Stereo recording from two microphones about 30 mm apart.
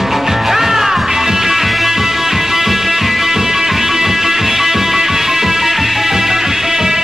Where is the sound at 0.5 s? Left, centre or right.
Centre.